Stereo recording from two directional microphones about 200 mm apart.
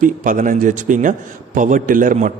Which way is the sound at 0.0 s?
40° right (ahead or behind).